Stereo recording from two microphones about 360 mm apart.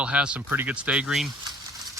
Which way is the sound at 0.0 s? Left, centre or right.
Centre.